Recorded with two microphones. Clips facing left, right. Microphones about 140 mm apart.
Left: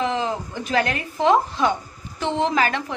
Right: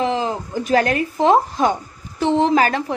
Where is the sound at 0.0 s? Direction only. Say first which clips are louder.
Right 3 dB; 35° right (ahead or behind).